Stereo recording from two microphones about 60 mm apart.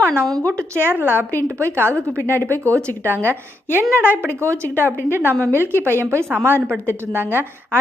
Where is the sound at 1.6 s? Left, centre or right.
Right.